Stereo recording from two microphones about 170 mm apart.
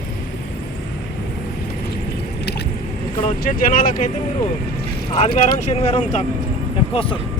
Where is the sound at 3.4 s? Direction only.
55° left (ahead or behind).